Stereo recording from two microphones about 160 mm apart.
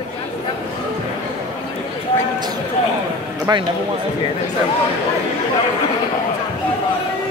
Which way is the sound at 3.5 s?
25° right (ahead or behind).